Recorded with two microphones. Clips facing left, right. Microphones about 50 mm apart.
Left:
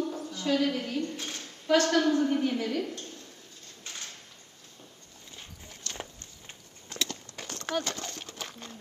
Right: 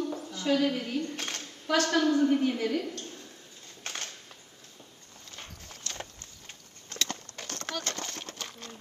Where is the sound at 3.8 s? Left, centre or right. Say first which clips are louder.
Right 5 dB; right.